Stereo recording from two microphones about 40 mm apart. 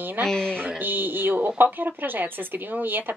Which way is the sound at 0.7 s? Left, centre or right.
Right.